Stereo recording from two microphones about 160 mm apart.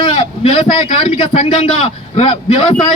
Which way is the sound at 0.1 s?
35° left (ahead or behind).